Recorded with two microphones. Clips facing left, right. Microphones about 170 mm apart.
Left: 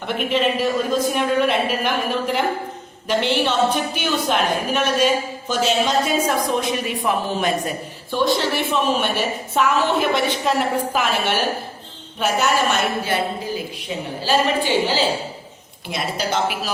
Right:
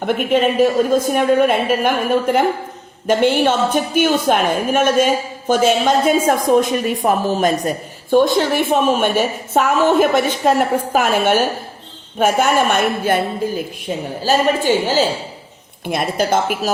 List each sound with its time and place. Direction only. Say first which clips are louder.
0.0 s a woman's voice: right 5 dB; 50° right (ahead or behind)